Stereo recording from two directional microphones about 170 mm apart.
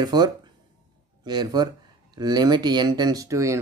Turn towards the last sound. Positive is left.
turn(degrees=-20)  # may be behind; listen again after turning